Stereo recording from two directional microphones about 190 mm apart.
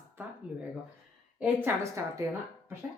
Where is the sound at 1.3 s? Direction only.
10° right (ahead or behind).